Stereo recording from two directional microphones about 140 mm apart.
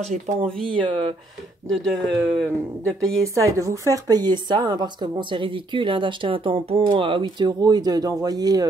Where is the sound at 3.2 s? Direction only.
25° right (ahead or behind).